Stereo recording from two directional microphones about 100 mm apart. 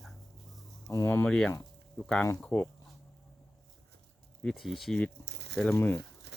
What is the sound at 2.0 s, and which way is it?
Speech, 10° left (ahead or behind).